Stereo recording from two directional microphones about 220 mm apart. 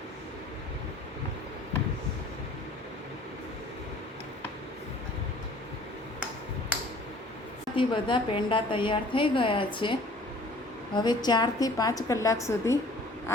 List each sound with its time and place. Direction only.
7.8 s a woman's voice: 20° left (ahead or behind)